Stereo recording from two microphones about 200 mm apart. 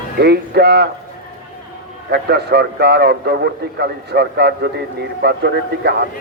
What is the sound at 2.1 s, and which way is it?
A man's voice, 55° right (ahead or behind).